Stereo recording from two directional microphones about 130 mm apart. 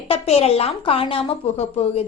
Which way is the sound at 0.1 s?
50° left (ahead or behind).